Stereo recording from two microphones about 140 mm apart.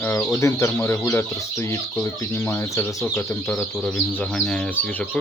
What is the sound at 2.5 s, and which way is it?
Speech, 20° left (ahead or behind).